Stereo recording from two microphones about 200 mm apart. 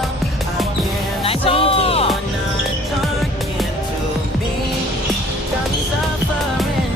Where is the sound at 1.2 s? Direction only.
30° left (ahead or behind).